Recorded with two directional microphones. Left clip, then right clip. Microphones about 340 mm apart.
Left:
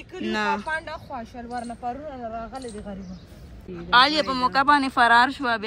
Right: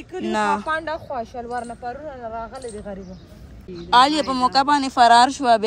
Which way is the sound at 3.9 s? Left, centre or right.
Centre.